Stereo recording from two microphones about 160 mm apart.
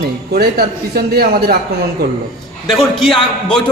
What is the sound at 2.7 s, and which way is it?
Speech, centre (ahead or behind).